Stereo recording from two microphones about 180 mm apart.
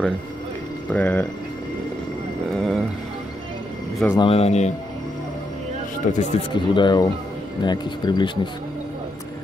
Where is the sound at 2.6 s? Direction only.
Centre (ahead or behind).